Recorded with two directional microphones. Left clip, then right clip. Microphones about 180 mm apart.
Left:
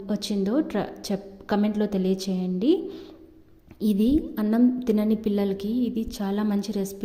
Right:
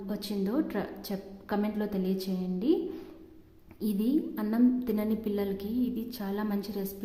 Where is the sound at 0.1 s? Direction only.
30° left (ahead or behind).